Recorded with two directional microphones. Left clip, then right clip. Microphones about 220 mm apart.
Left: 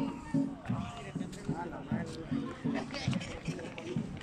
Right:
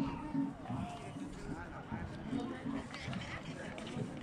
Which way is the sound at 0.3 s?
50° left (ahead or behind).